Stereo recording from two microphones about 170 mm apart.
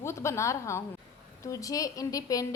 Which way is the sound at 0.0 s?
15° left (ahead or behind).